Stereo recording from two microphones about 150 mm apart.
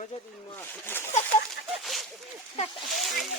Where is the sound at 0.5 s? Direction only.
15° left (ahead or behind).